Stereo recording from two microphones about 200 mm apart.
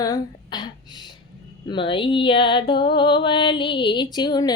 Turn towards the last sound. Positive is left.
turn(degrees=20)  # may be behind; listen again after turning